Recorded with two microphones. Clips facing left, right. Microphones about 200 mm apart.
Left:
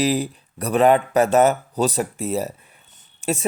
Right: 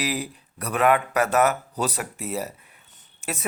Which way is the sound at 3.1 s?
30° left (ahead or behind).